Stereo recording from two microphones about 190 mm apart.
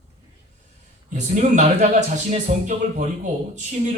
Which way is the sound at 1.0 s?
40° right (ahead or behind).